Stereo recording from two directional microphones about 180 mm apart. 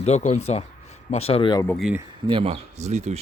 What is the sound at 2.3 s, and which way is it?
Speech, 35° right (ahead or behind).